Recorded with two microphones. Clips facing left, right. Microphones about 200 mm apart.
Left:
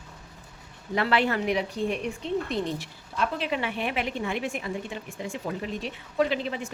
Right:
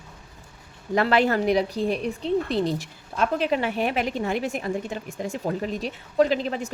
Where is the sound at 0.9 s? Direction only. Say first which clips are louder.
Right 4 dB; 40° right (ahead or behind).